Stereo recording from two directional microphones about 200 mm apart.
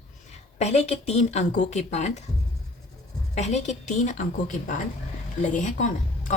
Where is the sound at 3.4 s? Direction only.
35° left (ahead or behind).